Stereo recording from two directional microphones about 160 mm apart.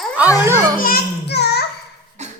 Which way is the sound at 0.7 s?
65° left (ahead or behind).